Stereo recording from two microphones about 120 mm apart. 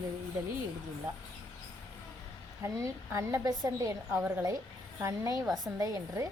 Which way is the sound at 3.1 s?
25° right (ahead or behind).